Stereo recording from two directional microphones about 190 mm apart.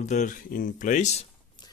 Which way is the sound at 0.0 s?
40° left (ahead or behind).